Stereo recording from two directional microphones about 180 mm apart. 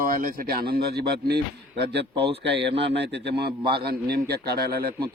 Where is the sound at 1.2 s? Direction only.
65° right (ahead or behind).